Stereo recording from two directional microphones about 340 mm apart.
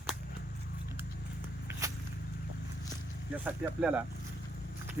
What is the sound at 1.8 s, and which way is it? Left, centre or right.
Whip, centre.